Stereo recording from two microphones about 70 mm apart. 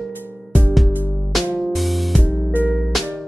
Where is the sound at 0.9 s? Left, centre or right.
Right.